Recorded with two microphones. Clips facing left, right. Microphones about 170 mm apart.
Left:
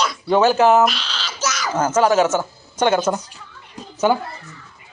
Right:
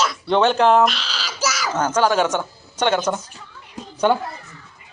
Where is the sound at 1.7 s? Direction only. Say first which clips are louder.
Left 3 dB; 5° left (ahead or behind).